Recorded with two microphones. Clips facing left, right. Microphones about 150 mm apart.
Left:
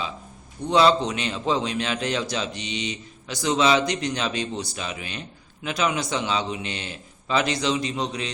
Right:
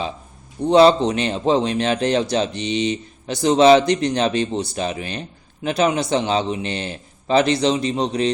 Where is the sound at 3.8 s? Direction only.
30° right (ahead or behind).